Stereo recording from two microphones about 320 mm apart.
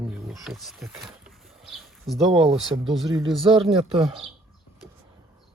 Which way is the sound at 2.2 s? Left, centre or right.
Centre.